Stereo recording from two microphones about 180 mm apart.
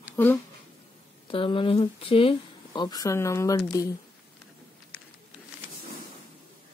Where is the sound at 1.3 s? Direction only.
30° left (ahead or behind).